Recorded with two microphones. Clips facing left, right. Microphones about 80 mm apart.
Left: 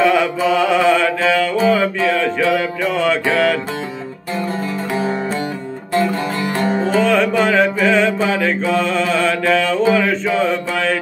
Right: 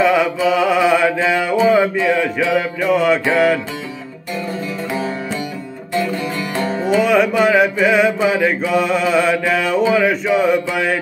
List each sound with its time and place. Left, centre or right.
0.0 s music: centre
6.5 s music: centre
6.8 s music: centre